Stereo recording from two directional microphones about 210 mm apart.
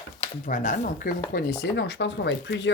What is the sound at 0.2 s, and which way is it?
Speech, 40° left (ahead or behind).